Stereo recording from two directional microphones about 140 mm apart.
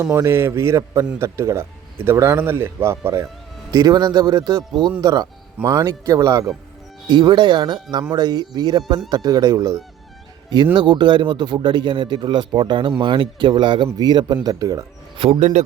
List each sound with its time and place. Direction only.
0.0 s a man's voice: 25° right (ahead or behind)
7.1 s a man's voice: 35° right (ahead or behind)
10.8 s a man's voice: 35° right (ahead or behind)
15.2 s a man's voice: 45° right (ahead or behind)